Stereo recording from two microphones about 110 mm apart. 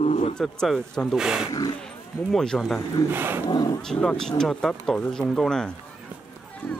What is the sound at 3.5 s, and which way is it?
Speech, 40° left (ahead or behind).